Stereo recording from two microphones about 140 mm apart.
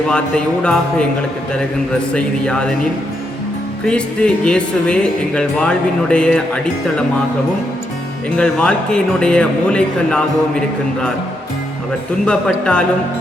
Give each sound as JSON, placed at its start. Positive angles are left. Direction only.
{"t": 0.1, "sound": "speech", "side_deg": 5}
{"t": 4.4, "sound": "speech", "side_deg": 5}
{"t": 8.4, "sound": "speech", "side_deg": 5}
{"t": 12.2, "sound": "speech", "side_deg": 5}